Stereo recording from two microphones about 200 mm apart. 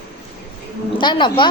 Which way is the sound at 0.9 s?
25° left (ahead or behind).